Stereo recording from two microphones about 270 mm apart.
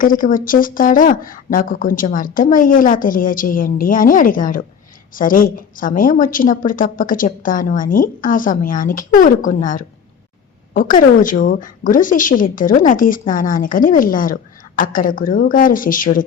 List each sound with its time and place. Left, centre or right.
0.0 s a woman's voice: left